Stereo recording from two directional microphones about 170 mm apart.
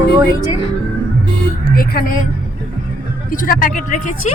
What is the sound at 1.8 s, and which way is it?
Speech, 55° left (ahead or behind).